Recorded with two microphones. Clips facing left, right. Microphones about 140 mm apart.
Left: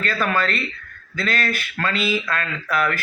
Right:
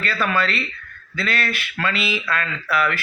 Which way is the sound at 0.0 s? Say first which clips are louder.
Even; 45° left (ahead or behind).